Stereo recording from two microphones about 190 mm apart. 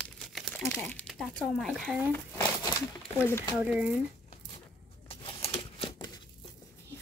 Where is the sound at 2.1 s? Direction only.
15° left (ahead or behind).